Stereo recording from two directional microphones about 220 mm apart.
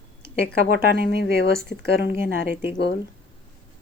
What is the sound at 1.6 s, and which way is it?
Speech, 50° left (ahead or behind).